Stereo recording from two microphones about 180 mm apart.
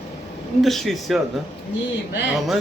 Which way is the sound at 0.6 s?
Centre (ahead or behind).